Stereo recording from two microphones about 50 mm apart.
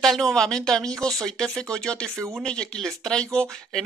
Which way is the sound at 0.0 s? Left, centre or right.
Centre.